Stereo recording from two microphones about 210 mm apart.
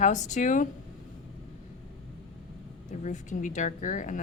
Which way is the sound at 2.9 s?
35° left (ahead or behind).